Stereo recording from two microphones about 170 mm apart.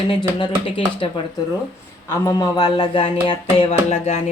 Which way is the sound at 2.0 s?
20° left (ahead or behind).